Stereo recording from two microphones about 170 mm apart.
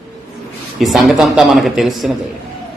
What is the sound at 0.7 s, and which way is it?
Speech, centre (ahead or behind).